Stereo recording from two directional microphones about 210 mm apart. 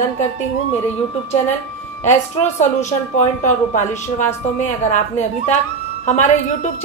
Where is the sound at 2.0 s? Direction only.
35° left (ahead or behind).